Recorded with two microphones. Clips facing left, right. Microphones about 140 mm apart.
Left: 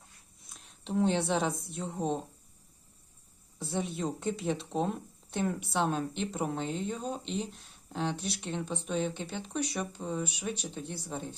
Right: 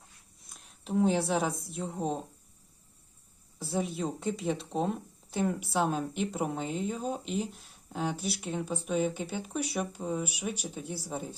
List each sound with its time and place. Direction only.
0.4 s speech: centre (ahead or behind)
3.6 s speech: centre (ahead or behind)